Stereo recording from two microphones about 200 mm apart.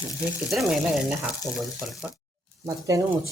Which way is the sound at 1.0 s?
5° right (ahead or behind).